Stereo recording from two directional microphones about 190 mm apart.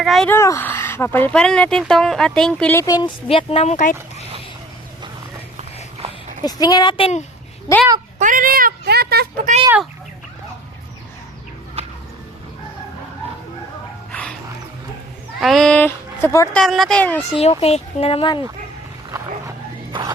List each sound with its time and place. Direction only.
0.0 s speech: centre (ahead or behind)
0.3 s speech: 15° left (ahead or behind); by 3.9 s 40° left (ahead or behind)
6.4 s speech: 20° left (ahead or behind)
7.7 s speech: 20° left (ahead or behind)
8.2 s speech: 45° right (ahead or behind)
14.1 s dog: 5° left (ahead or behind)
15.4 s speech: centre (ahead or behind)
16.6 s speech: centre (ahead or behind)
17.3 s speech: 30° left (ahead or behind)
19.1 s dog: 20° right (ahead or behind)